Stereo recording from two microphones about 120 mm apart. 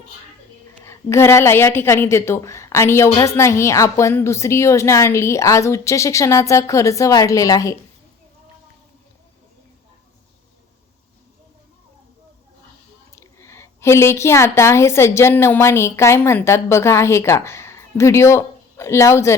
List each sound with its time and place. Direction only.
0.9 s a woman's voice: 20° left (ahead or behind)
13.1 s a woman's voice: 20° left (ahead or behind)